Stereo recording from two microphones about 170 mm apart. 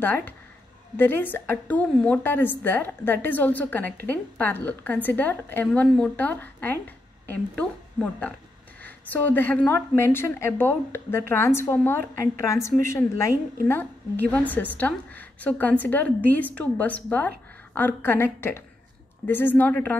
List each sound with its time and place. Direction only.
0.9 s a woman's voice: 10° left (ahead or behind)